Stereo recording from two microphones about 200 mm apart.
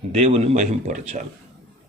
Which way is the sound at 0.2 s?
35° right (ahead or behind).